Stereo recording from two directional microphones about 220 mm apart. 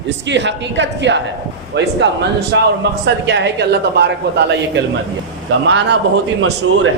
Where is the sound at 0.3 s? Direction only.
55° right (ahead or behind).